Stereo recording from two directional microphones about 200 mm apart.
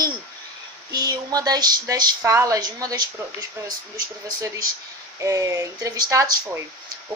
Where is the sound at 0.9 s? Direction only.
20° right (ahead or behind).